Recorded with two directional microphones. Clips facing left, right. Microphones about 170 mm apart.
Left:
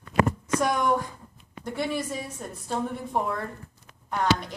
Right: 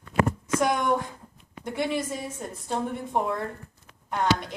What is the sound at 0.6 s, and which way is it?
A woman's voice, 20° right (ahead or behind).